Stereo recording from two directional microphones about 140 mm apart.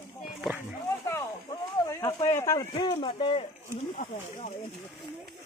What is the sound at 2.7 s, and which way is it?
Speech, 35° left (ahead or behind).